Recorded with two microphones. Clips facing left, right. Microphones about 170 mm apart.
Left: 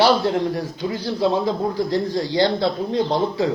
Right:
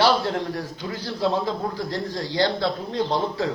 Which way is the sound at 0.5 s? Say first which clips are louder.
Left 5 dB; 15° left (ahead or behind).